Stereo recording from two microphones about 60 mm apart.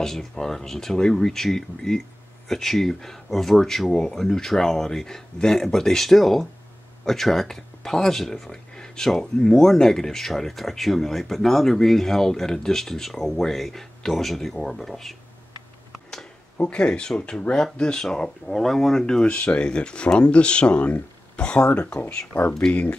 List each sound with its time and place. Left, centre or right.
0.0 s speech: centre
16.5 s speech: centre
19.2 s speech: left